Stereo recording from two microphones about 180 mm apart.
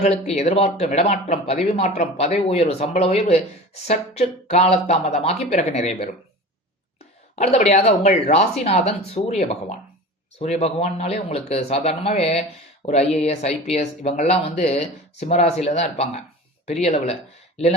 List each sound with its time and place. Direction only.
0.0 s speech: 35° left (ahead or behind)
7.3 s speech: 35° left (ahead or behind)